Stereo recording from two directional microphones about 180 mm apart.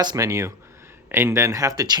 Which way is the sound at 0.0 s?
20° right (ahead or behind).